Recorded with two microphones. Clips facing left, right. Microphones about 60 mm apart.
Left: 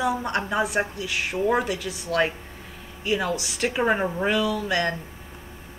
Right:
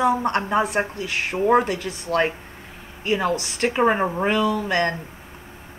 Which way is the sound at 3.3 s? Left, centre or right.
Right.